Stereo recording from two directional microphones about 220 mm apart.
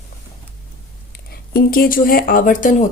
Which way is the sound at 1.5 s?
40° left (ahead or behind).